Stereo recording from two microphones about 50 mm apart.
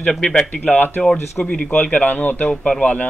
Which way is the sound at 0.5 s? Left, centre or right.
Left.